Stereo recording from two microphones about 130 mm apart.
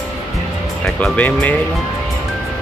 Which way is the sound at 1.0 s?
10° left (ahead or behind).